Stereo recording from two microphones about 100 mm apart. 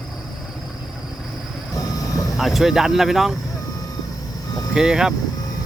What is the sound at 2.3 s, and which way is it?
Speech, centre (ahead or behind).